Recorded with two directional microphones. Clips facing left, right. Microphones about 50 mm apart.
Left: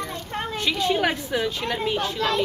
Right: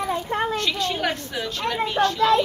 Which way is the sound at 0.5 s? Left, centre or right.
Centre.